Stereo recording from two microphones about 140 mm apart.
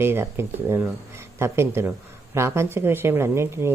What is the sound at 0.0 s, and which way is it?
Speech, 15° right (ahead or behind).